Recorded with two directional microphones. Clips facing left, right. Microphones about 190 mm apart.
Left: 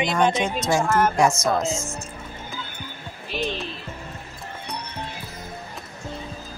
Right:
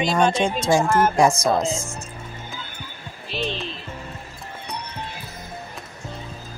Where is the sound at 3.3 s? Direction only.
15° left (ahead or behind).